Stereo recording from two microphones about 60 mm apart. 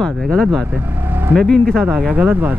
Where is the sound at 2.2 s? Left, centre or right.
Right.